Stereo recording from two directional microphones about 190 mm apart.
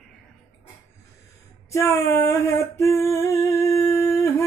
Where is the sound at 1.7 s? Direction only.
15° left (ahead or behind).